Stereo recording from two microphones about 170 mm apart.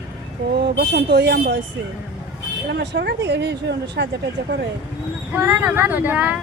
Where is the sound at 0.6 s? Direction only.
75° right (ahead or behind).